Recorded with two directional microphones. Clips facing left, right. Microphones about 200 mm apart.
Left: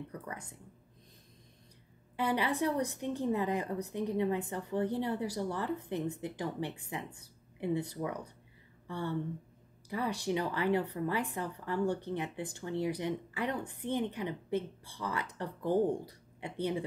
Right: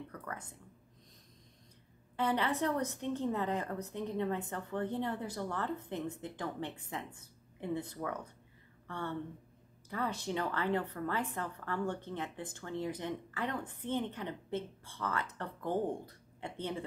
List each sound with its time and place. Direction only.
2.1 s a woman's voice: 10° left (ahead or behind)